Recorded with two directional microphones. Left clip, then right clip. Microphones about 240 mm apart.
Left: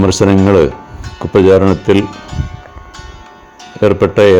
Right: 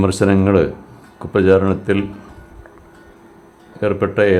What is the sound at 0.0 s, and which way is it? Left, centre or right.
Speech, left.